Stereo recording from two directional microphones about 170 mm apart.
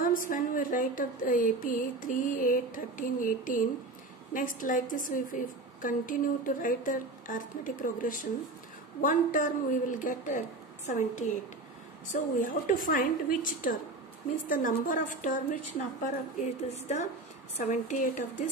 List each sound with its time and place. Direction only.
0.0 s a woman's voice: 55° left (ahead or behind)